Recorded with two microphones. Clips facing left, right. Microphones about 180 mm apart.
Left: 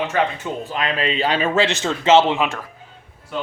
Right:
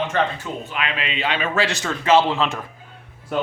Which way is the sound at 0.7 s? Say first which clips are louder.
Left 7 dB; 40° left (ahead or behind).